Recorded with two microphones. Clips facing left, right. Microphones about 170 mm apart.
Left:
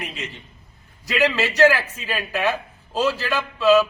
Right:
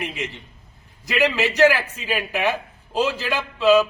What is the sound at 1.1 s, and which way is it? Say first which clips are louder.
A man's voice: even; 15° right (ahead or behind).